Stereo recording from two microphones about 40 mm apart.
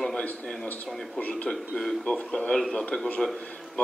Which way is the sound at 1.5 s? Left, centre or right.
Centre.